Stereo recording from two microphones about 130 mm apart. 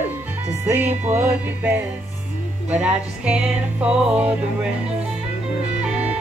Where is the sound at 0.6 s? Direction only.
15° right (ahead or behind).